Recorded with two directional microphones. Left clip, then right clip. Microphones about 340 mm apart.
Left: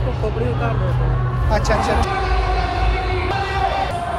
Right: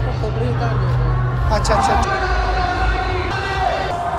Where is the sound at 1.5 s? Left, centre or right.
Centre.